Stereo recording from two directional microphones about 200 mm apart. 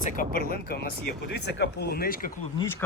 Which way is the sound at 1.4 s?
55° left (ahead or behind).